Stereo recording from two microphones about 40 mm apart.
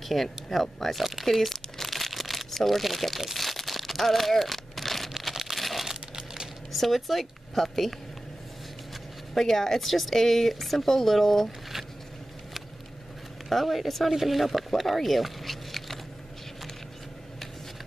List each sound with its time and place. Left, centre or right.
0.1 s speech: centre
3.3 s crumpling: centre
5.3 s a sound: centre
5.6 s crumpling: centre
5.9 s crumpling: centre
6.7 s speech: centre
9.3 s speech: centre
13.5 s speech: centre